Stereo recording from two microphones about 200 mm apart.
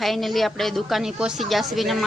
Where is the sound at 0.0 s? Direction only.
Centre (ahead or behind).